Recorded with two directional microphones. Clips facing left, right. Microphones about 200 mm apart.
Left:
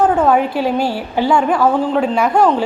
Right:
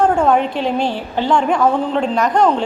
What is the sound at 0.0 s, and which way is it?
A woman's voice, 5° left (ahead or behind).